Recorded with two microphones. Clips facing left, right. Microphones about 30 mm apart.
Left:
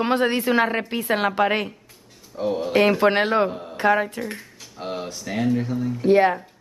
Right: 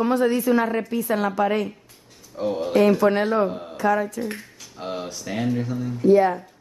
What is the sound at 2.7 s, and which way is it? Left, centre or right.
Speech, left.